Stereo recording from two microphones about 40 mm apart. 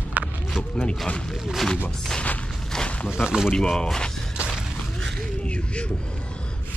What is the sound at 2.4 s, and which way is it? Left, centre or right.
Walk, centre.